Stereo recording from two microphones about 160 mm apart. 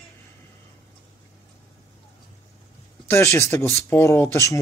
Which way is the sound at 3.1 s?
20° left (ahead or behind).